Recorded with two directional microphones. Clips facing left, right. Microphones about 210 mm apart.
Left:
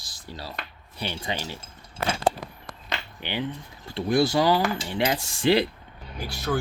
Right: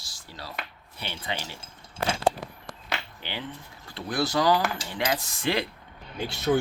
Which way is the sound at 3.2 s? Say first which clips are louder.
Left 6 dB; 20° left (ahead or behind).